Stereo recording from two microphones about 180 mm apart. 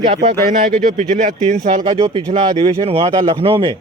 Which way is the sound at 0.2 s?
45° right (ahead or behind).